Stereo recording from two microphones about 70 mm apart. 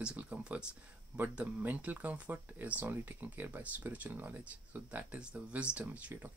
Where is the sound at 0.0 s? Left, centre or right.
Right.